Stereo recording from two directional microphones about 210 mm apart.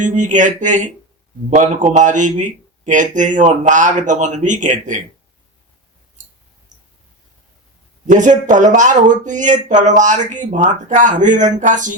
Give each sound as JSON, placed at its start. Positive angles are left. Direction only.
{"t": 0.0, "sound": "speech", "side_deg": -35}
{"t": 8.0, "sound": "speech", "side_deg": -35}